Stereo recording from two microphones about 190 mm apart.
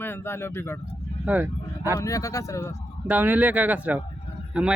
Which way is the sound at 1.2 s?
10° right (ahead or behind).